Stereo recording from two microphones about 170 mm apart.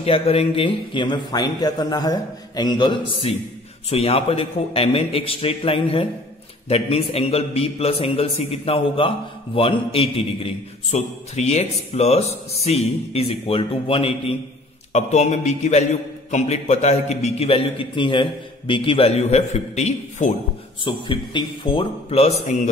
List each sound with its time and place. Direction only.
0.0 s a man's voice: 35° left (ahead or behind)
20.8 s a man's voice: 30° left (ahead or behind)